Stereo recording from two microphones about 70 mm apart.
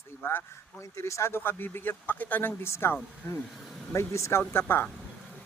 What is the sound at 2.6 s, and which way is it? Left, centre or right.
Speech, left.